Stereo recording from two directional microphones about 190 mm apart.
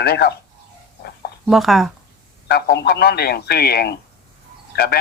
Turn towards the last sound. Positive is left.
turn(degrees=55)  # may be behind; listen again after turning